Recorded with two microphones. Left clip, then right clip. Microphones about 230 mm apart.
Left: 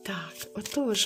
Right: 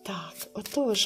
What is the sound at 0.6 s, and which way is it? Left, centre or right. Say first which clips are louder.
Speech: right 2 dB; left.